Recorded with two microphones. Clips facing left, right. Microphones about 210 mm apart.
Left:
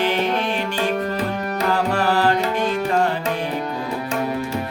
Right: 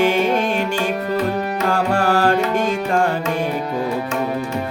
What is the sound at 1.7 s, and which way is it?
Music, 45° right (ahead or behind).